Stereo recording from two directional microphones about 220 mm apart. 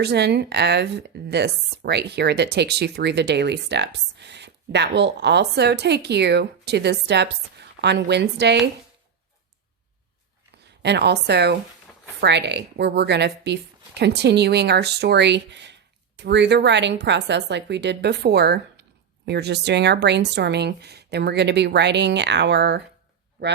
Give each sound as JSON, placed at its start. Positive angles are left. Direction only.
{"t": 0.0, "sound": "speech", "side_deg": -50}
{"t": 10.8, "sound": "speech", "side_deg": -50}